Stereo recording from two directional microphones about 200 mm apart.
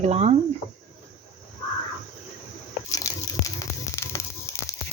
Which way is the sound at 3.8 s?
15° left (ahead or behind).